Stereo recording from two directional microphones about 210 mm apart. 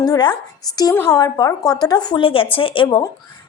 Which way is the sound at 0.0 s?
20° left (ahead or behind).